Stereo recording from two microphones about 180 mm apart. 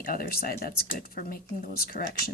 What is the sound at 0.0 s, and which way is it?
Speech, 55° left (ahead or behind).